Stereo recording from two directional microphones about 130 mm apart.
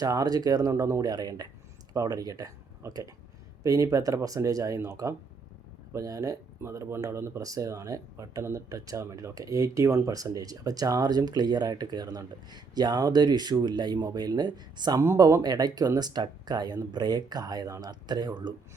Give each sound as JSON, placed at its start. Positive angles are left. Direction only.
{"t": 0.0, "sound": "speech", "side_deg": -30}